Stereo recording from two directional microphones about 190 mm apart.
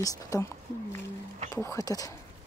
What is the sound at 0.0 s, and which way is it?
Speech, 15° left (ahead or behind).